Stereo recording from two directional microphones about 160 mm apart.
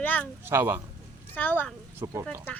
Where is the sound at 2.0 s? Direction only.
20° right (ahead or behind).